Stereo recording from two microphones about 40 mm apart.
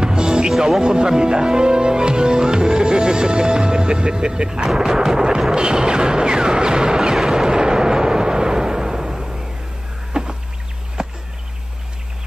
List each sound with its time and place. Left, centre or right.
0.0 s music: centre
0.5 s speech: centre
5.5 s music: centre
7.2 s a sound: centre